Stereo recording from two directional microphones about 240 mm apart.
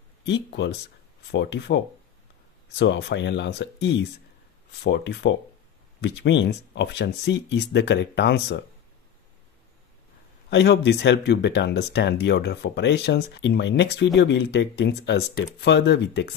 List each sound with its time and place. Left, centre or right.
0.2 s speech: left
2.8 s speech: left
10.5 s speech: left